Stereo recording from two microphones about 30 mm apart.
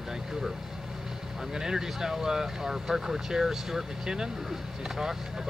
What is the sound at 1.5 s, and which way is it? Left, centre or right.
Speech, centre.